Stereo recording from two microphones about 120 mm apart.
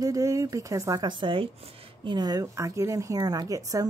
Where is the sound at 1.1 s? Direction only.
45° right (ahead or behind).